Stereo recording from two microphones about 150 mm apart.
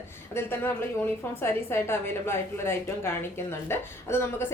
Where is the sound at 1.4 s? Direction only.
15° left (ahead or behind).